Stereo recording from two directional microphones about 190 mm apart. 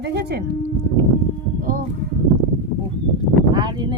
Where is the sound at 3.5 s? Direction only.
25° right (ahead or behind).